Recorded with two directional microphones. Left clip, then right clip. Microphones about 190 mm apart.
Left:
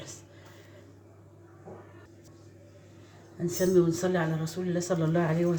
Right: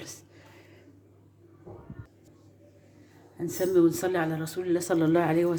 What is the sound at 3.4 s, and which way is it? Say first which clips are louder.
Speech: right 1 dB; 40° right (ahead or behind).